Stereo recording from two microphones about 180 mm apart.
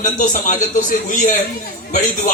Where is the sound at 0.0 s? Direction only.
45° left (ahead or behind).